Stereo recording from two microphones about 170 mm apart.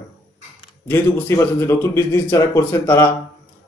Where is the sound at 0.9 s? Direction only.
15° left (ahead or behind).